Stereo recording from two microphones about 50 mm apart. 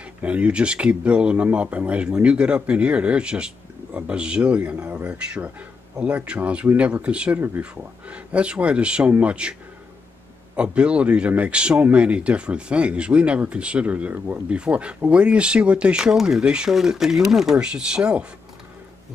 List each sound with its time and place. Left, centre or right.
0.2 s speech: right
7.3 s speech: right
8.1 s speech: right
14.1 s speech: right
14.5 s speech: right
16.4 s speech: right
16.7 s speech: centre
17.6 s speech: centre